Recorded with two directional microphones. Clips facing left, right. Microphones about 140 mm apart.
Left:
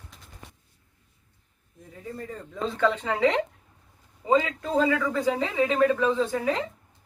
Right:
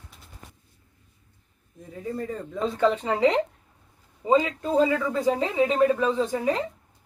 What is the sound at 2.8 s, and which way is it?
Speech, 10° right (ahead or behind).